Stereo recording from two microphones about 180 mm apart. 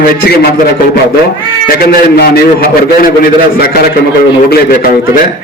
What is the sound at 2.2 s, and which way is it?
A man's voice, 60° left (ahead or behind).